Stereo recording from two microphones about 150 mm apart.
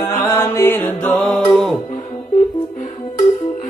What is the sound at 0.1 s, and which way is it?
Music, 20° left (ahead or behind).